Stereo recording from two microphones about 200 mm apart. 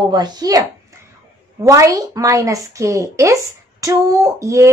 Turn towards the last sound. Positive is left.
turn(degrees=-15)  # may be behind; listen again after turning